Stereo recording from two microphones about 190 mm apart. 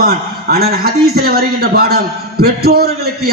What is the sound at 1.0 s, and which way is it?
A man's voice, 55° right (ahead or behind).